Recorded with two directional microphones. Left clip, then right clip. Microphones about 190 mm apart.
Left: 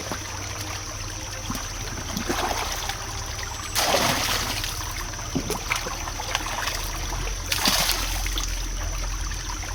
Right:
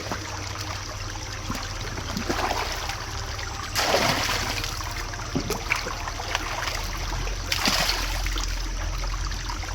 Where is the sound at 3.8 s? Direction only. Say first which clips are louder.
Even; 20° left (ahead or behind).